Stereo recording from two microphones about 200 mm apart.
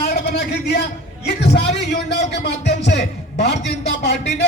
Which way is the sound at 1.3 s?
55° left (ahead or behind).